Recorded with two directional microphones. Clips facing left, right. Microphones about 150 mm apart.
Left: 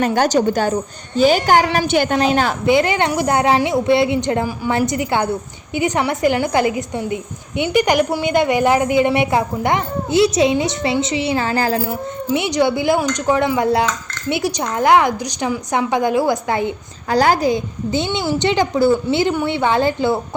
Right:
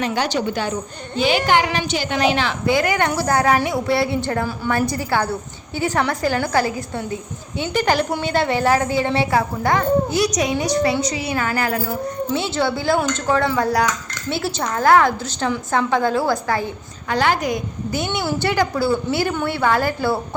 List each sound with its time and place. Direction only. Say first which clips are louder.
0.0 s a woman's voice: left 6 dB; 45° left (ahead or behind)
1.9 s a woman's voice: left 7 dB; 55° left (ahead or behind)
2.1 s a woman's voice: left 3 dB; 40° left (ahead or behind)
2.6 s a woman's voice: left 2 dB; 20° left (ahead or behind)
12.3 s a woman's voice: left 6 dB; 15° left (ahead or behind)
17.1 s a woman's voice: left 4 dB; 40° left (ahead or behind); by 20.2 s 20° left (ahead or behind)